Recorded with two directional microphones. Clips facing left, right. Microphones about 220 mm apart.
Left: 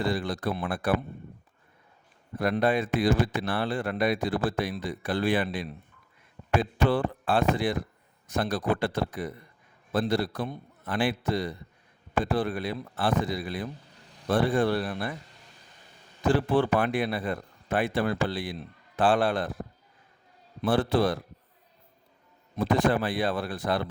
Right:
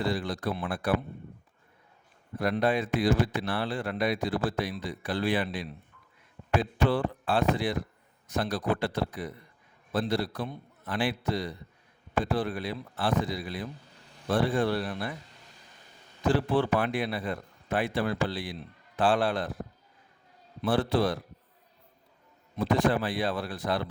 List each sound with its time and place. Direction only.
0.0 s speech: 50° left (ahead or behind)
2.4 s speech: 50° left (ahead or behind)
16.2 s speech: 50° left (ahead or behind)
20.6 s speech: 50° left (ahead or behind)
22.5 s speech: 50° left (ahead or behind)